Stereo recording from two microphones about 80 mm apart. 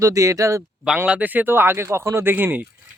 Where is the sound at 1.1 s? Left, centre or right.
Centre.